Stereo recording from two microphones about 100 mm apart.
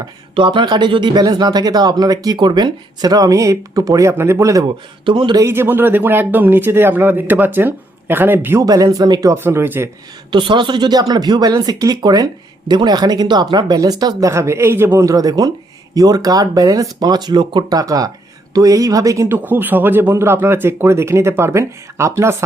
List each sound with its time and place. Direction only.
0.3 s speech: 55° right (ahead or behind); by 4.6 s 30° right (ahead or behind)
4.6 s speech: 50° right (ahead or behind)
5.5 s speech: 20° right (ahead or behind)
8.6 s speech: 40° right (ahead or behind)
9.3 s speech: 25° right (ahead or behind)
10.3 s speech: 50° right (ahead or behind)
14.3 s speech: 30° right (ahead or behind); by 17.7 s 50° right (ahead or behind)
17.7 s speech: 40° right (ahead or behind)
19.5 s speech: 20° right (ahead or behind)